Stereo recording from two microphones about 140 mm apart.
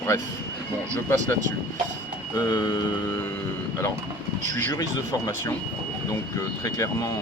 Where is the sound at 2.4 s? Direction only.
25° left (ahead or behind).